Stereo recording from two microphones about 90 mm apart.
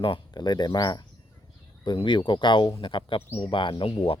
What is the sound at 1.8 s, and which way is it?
Speech, 65° left (ahead or behind).